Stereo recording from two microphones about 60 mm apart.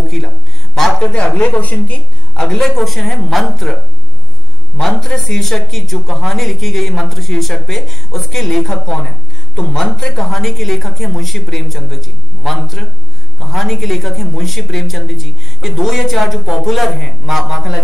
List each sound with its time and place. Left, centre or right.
0.7 s a man's voice: centre
1.0 s speech: centre
2.3 s speech: centre
4.8 s speech: centre